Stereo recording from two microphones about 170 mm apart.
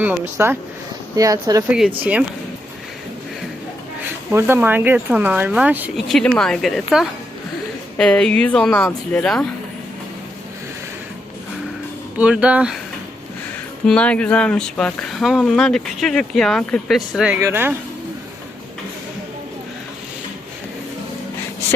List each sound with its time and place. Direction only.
0.0 s speech: 15° right (ahead or behind)
4.3 s speech: 15° right (ahead or behind)
6.1 s speech: 5° left (ahead or behind)
7.9 s speech: 5° left (ahead or behind)
12.1 s speech: 5° right (ahead or behind)
13.8 s speech: 5° left (ahead or behind)
17.4 s speech: 15° right (ahead or behind)